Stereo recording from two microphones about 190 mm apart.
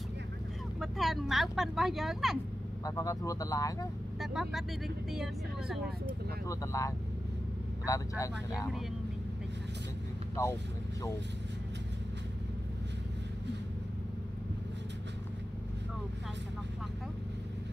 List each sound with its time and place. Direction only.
0.7 s speech: centre (ahead or behind)
2.8 s speech: 15° left (ahead or behind)
4.2 s speech: centre (ahead or behind)
6.4 s speech: 15° left (ahead or behind)
10.3 s speech: 15° left (ahead or behind)